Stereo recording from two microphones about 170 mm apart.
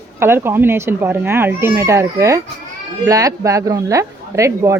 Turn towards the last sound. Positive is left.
turn(degrees=-15)  # may be behind; listen again after turning